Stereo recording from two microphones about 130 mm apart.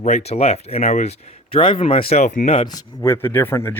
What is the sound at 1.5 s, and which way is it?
Speech, 45° left (ahead or behind).